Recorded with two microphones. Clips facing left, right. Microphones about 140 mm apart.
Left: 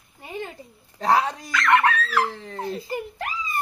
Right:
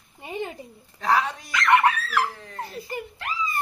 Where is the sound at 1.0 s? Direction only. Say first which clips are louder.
Left 2 dB; 35° left (ahead or behind).